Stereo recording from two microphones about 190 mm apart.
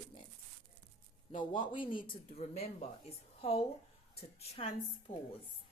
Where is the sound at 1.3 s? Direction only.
45° left (ahead or behind).